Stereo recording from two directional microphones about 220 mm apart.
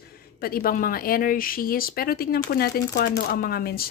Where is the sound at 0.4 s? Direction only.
45° left (ahead or behind).